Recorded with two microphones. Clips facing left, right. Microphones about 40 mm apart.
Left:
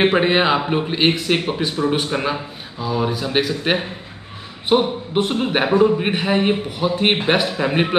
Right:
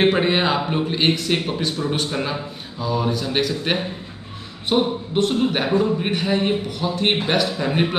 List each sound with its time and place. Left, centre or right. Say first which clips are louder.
0.0 s a man's voice: left 2 dB; centre